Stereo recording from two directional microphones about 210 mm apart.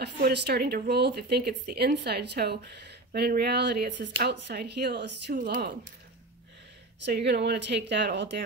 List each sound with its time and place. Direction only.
0.0 s speech: 50° right (ahead or behind)
7.1 s speech: 50° right (ahead or behind)